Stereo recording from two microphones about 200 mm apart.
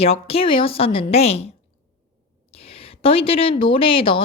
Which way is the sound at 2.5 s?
30° left (ahead or behind).